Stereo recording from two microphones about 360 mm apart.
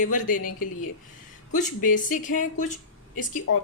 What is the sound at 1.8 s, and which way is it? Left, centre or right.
Speech, left.